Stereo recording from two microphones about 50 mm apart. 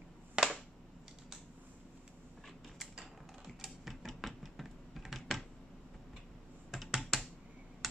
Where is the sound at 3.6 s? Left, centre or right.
Centre.